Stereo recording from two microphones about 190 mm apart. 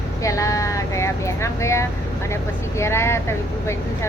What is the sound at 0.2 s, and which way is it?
Speech, 15° left (ahead or behind).